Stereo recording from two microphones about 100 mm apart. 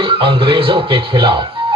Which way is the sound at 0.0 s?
65° right (ahead or behind).